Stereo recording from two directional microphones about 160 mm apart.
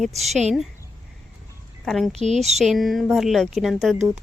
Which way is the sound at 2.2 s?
45° right (ahead or behind).